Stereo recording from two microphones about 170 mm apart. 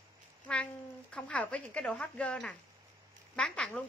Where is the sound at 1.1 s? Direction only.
5° left (ahead or behind).